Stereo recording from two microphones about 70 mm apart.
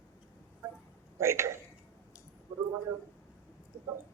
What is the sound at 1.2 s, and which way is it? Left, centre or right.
Speech, right.